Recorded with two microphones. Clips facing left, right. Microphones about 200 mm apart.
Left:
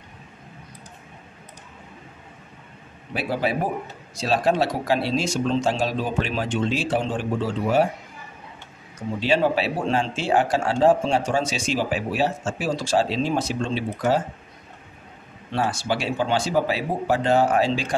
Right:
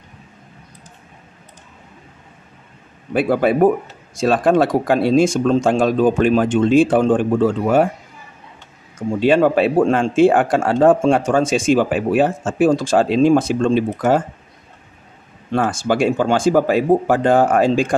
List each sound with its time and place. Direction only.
3.1 s speech: 55° right (ahead or behind)
9.2 s speech: 50° right (ahead or behind)
15.5 s speech: 50° right (ahead or behind)